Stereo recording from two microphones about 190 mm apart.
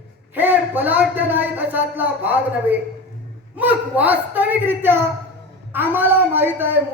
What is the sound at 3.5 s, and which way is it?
A man's voice, 10° right (ahead or behind).